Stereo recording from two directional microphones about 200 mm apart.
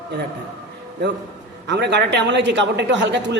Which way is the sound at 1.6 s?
60° right (ahead or behind).